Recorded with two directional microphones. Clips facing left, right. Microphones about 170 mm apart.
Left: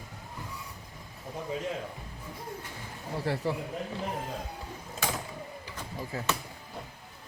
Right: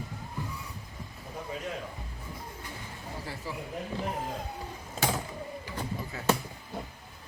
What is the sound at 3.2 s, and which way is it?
Speech, 65° left (ahead or behind).